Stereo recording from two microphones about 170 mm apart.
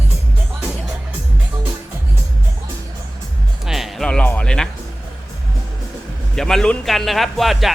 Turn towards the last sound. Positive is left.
turn(degrees=0)  # may be behind; listen again after turning